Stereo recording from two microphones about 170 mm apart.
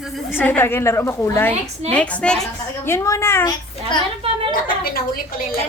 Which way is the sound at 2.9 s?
15° left (ahead or behind).